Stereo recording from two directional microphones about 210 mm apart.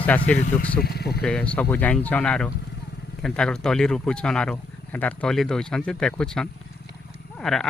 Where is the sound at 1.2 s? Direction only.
5° left (ahead or behind).